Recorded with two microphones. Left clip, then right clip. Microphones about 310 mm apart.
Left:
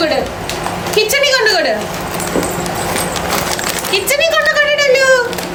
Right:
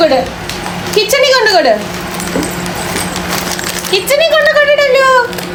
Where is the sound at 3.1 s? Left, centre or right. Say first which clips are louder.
Even; centre.